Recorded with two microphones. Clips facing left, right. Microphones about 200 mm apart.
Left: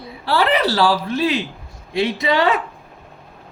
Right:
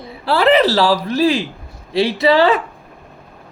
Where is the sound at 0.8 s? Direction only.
40° right (ahead or behind).